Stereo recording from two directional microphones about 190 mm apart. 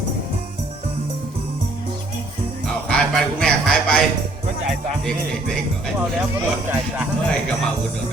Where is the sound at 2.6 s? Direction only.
5° left (ahead or behind).